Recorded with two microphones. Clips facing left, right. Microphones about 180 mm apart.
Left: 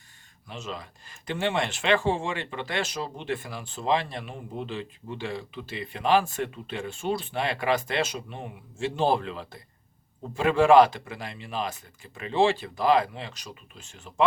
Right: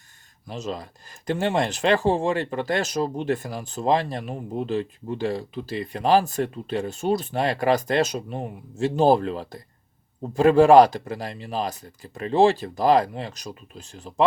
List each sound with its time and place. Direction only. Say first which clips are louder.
0.4 s speech: right 6 dB; 40° right (ahead or behind)